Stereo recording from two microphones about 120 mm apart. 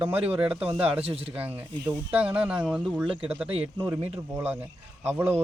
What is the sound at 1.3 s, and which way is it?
Speech, 15° right (ahead or behind).